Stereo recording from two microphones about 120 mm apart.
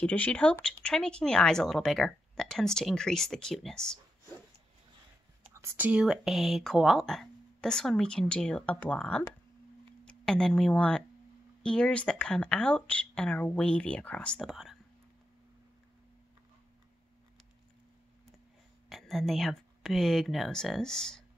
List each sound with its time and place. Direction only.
0.0 s speech: 10° left (ahead or behind)
5.5 s whispering: 25° right (ahead or behind)
5.9 s speech: 5° right (ahead or behind)
18.9 s speech: centre (ahead or behind)